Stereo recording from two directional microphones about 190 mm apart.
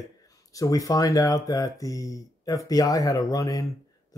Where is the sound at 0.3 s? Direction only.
20° left (ahead or behind).